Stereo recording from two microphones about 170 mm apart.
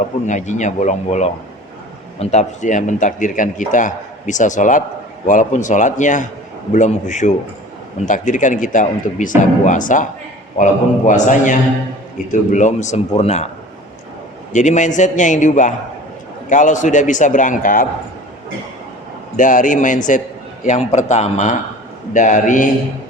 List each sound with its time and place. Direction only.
0.3 s speech: 45° left (ahead or behind)
14.5 s speech: 45° left (ahead or behind)
19.4 s speech: 50° left (ahead or behind)